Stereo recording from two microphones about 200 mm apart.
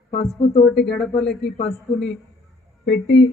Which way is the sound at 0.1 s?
30° left (ahead or behind).